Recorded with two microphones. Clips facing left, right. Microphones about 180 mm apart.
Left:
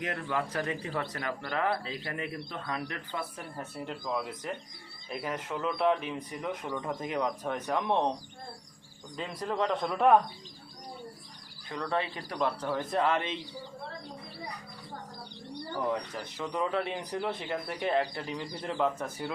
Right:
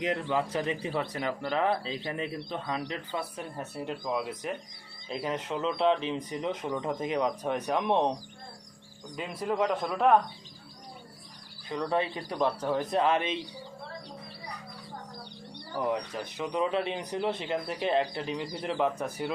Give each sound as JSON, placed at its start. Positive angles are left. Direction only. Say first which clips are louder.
{"t": 0.0, "sound": "speech", "louder": "right 4 dB", "side_deg": -20}
{"t": 9.1, "sound": "a man's voice", "louder": "right 2 dB", "side_deg": -10}
{"t": 11.7, "sound": "a man's voice", "louder": "right 3 dB", "side_deg": -15}
{"t": 15.7, "sound": "speech", "louder": "right 2 dB", "side_deg": -15}